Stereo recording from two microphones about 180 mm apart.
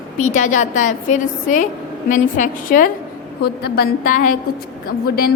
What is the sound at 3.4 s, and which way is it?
A woman's voice, 60° left (ahead or behind).